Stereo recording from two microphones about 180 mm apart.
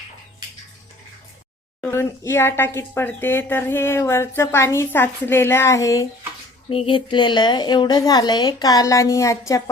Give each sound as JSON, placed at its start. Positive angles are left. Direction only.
{"t": 1.8, "sound": "speech", "side_deg": 15}
{"t": 6.7, "sound": "a woman's voice", "side_deg": 30}